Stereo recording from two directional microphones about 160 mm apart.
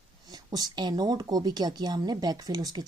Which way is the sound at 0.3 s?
25° right (ahead or behind).